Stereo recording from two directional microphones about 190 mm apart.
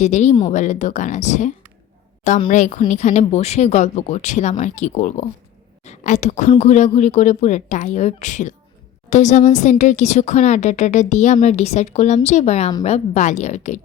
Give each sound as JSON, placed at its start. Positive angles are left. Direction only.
{"t": 0.0, "sound": "speech", "side_deg": 35}